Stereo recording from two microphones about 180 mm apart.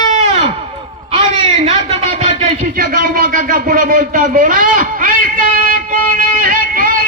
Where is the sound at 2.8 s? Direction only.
50° right (ahead or behind).